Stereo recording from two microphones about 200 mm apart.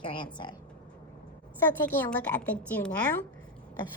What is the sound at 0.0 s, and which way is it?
Speech, 25° left (ahead or behind).